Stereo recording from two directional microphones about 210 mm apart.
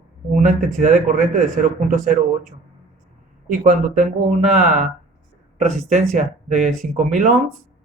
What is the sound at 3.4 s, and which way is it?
Speech, 40° right (ahead or behind).